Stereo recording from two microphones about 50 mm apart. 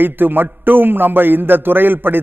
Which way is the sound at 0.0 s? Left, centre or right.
Right.